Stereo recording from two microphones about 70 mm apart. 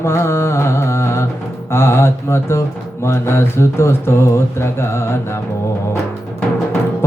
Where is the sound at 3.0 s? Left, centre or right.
Left.